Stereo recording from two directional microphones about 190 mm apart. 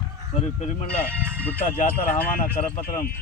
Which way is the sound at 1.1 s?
10° right (ahead or behind).